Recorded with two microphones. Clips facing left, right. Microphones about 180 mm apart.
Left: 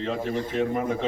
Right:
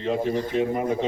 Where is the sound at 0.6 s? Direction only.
20° right (ahead or behind).